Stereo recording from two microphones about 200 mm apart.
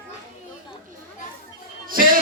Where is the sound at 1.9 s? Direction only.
45° right (ahead or behind).